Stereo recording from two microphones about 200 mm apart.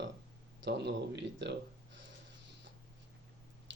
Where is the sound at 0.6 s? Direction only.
60° right (ahead or behind).